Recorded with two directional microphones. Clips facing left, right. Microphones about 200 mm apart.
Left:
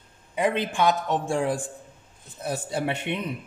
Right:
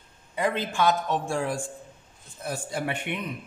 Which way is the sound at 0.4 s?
20° left (ahead or behind).